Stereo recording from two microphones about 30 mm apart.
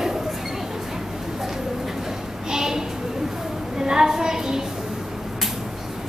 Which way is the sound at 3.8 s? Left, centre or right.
Right.